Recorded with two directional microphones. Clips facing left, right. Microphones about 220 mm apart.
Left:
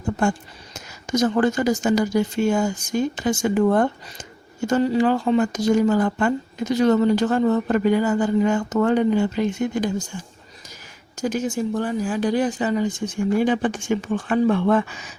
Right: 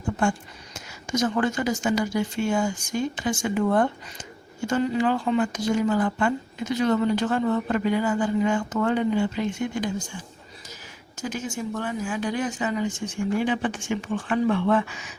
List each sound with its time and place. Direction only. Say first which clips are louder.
0.0 s speech: left 3 dB; 40° left (ahead or behind)
11.3 s speech: left 7 dB; 40° left (ahead or behind)